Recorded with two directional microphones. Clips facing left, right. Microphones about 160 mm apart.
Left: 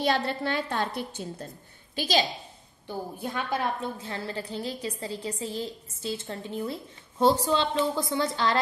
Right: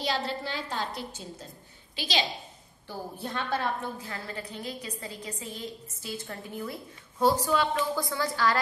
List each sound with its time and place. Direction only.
0.0 s a woman's voice: 55° left (ahead or behind)
2.0 s a woman's voice: 45° left (ahead or behind)
2.9 s a woman's voice: 15° left (ahead or behind)
4.0 s a woman's voice: 30° left (ahead or behind)